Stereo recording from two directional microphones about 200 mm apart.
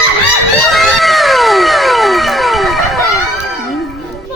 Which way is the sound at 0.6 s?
Centre (ahead or behind).